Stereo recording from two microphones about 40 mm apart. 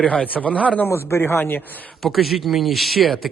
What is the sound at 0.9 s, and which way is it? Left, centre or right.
Speech, left.